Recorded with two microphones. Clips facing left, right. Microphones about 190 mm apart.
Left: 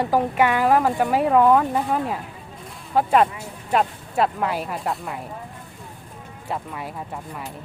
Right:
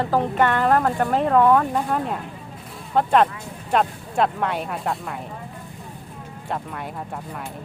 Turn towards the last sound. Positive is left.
turn(degrees=0)  # may be behind; listen again after turning